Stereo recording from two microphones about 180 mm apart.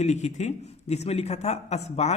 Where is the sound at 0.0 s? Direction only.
40° left (ahead or behind).